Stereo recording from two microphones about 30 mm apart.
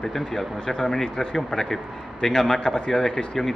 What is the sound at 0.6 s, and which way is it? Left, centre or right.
A man's voice, left.